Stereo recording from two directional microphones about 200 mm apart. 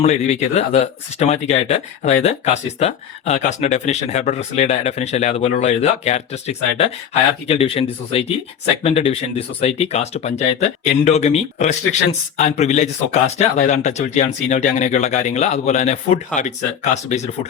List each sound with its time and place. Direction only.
0.0 s speech: 35° left (ahead or behind)